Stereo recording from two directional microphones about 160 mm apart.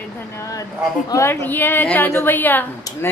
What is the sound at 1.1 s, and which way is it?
A woman's voice, 15° left (ahead or behind).